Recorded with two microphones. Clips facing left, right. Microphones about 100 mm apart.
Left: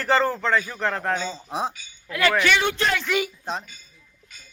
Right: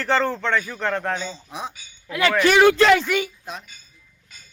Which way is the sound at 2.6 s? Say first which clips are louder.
Right 10 dB; 90° right.